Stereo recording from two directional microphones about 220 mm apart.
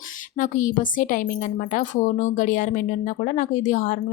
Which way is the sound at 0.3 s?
35° left (ahead or behind).